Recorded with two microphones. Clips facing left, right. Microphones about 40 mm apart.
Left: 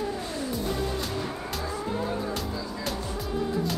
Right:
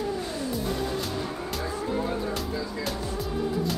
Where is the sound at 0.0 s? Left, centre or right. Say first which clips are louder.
Right 1 dB; centre.